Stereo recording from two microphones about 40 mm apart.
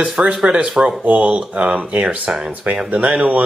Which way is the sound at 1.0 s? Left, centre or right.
Right.